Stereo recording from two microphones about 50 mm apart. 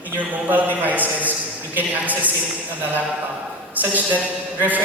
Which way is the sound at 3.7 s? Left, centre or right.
Right.